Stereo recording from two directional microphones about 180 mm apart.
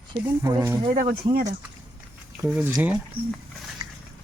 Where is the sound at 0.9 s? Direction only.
55° right (ahead or behind).